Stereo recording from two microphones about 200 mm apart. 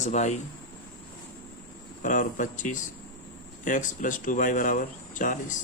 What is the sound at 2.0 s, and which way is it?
Speech, 40° left (ahead or behind).